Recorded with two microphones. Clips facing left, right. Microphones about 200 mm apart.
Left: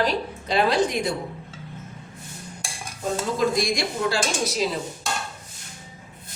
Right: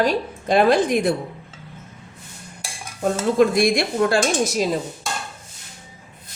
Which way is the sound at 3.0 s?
60° right (ahead or behind).